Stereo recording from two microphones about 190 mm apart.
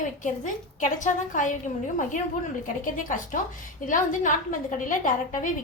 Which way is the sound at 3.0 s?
45° left (ahead or behind).